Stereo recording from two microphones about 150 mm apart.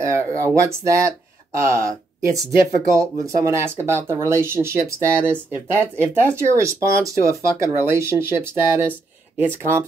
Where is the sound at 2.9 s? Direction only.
20° right (ahead or behind).